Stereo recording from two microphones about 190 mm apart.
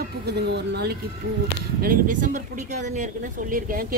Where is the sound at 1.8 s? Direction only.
45° right (ahead or behind).